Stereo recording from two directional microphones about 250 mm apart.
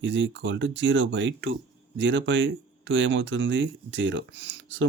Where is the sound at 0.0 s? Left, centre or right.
Right.